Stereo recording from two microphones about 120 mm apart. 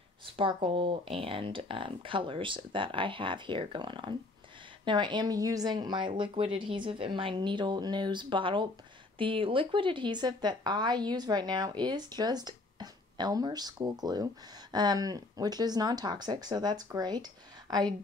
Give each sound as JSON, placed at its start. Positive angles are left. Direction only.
{"t": 0.2, "sound": "a woman's voice", "side_deg": -45}